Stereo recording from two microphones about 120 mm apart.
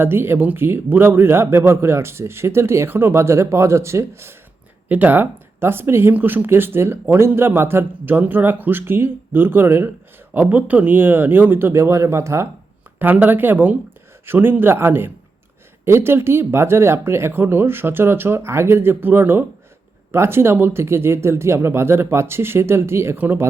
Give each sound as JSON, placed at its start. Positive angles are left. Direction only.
{"t": 0.0, "sound": "a man's voice", "side_deg": -20}